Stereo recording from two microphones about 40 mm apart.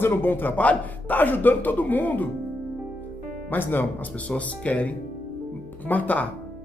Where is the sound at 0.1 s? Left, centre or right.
Left.